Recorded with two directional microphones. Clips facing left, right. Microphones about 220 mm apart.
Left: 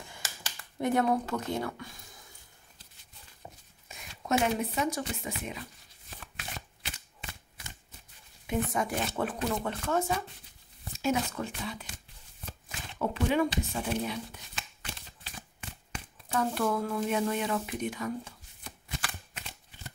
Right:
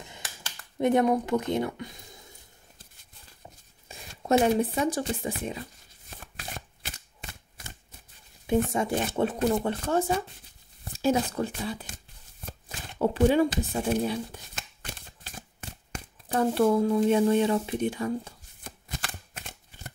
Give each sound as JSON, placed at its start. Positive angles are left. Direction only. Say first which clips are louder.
{"t": 0.7, "sound": "a woman's voice", "louder": "right 5 dB", "side_deg": -20}
{"t": 4.3, "sound": "speech", "louder": "right 6 dB", "side_deg": -30}
{"t": 6.0, "sound": "shuffling cards", "louder": "right 3 dB", "side_deg": -45}
{"t": 8.7, "sound": "a woman's voice", "louder": "right 4 dB", "side_deg": -25}
{"t": 12.4, "sound": "shuffling cards", "louder": "right 2 dB", "side_deg": -35}
{"t": 18.6, "sound": "shuffling cards", "louder": "right 1 dB", "side_deg": -45}